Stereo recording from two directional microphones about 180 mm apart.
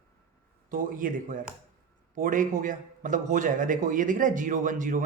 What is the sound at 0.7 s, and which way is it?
A man's voice, 50° right (ahead or behind).